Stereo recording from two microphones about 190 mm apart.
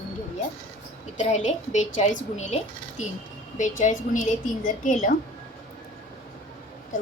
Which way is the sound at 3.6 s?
40° left (ahead or behind).